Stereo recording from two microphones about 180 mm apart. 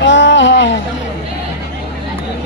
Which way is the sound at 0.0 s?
90° left.